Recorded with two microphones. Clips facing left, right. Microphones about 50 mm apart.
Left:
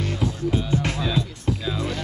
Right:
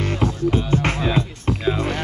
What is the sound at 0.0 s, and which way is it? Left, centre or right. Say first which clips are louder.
Music: right 4 dB; right.